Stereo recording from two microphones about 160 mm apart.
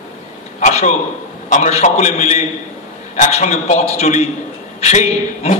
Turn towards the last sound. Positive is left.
turn(degrees=45)  # may be behind; listen again after turning